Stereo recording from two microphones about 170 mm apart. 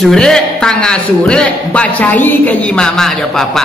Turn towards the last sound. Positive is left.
turn(degrees=0)  # may be behind; listen again after turning